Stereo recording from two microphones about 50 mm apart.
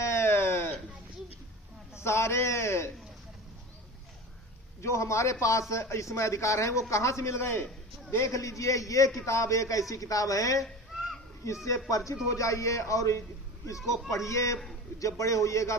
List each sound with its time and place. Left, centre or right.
0.0 s a sound: left
2.0 s a man's voice: left
4.8 s a man's voice: left
8.1 s a man's voice: left
10.6 s a sound: centre
11.9 s a man's voice: left
14.3 s a man's voice: left